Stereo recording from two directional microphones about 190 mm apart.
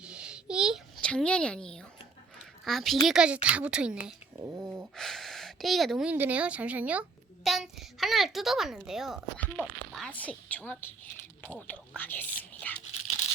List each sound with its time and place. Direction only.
0.0 s a sound: 5° right (ahead or behind)
2.4 s a child's voice: centre (ahead or behind)
4.9 s a woman's voice: centre (ahead or behind)